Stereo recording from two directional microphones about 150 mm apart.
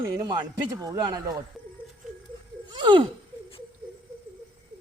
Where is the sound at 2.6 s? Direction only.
30° right (ahead or behind).